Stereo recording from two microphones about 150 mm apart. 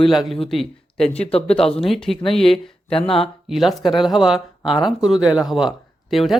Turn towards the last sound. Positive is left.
turn(degrees=0)  # may be behind; listen again after turning